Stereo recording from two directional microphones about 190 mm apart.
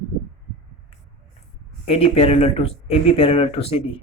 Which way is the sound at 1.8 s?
30° left (ahead or behind).